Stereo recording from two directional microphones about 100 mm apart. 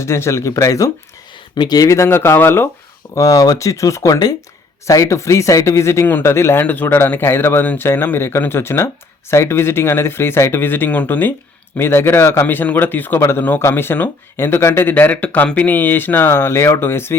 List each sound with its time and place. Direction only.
0.0 s speech: 30° left (ahead or behind)
3.2 s speech: 35° left (ahead or behind)